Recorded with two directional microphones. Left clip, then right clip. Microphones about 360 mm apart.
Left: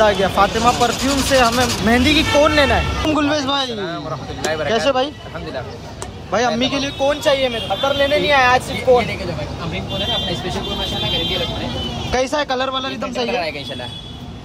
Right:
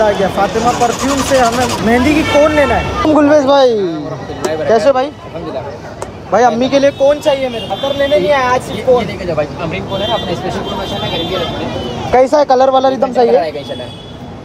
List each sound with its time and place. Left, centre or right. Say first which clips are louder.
0.0 s speech: right 2 dB; centre
3.1 s speech: right 11 dB; centre
6.3 s speech: right 8 dB; centre
8.4 s speech: right 1 dB; centre
12.1 s speech: right 11 dB; centre